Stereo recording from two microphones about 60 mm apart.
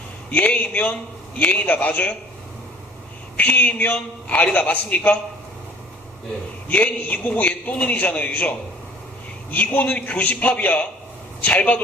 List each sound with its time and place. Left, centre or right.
0.3 s a man's voice: left
3.3 s a man's voice: left
6.7 s a man's voice: left